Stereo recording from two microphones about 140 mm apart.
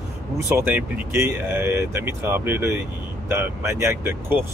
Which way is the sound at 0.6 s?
20° right (ahead or behind).